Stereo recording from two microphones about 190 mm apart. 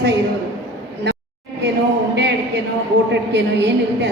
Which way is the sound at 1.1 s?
60° right (ahead or behind).